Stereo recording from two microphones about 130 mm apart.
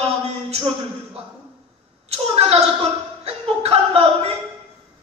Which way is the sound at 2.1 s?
50° right (ahead or behind).